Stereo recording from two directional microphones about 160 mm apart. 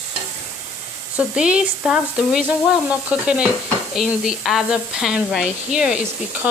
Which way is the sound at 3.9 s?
Centre (ahead or behind).